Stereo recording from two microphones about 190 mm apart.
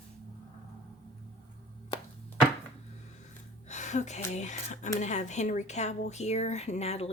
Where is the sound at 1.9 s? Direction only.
30° left (ahead or behind).